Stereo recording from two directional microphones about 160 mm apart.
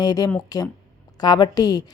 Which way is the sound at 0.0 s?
25° left (ahead or behind).